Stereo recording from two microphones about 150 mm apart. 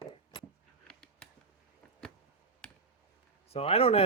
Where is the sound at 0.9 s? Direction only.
5° left (ahead or behind).